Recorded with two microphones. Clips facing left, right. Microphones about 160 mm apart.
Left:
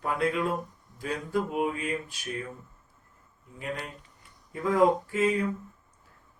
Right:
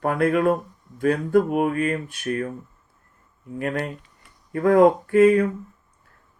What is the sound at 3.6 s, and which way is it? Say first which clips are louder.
Speech: right 9 dB; 60° right (ahead or behind).